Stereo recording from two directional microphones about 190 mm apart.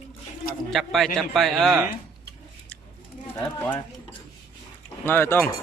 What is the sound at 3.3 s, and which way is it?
Speech, 15° left (ahead or behind).